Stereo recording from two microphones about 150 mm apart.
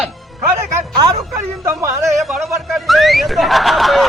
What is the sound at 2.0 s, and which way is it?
A woman's voice, centre (ahead or behind).